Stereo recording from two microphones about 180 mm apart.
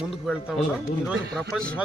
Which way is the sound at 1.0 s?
Centre (ahead or behind).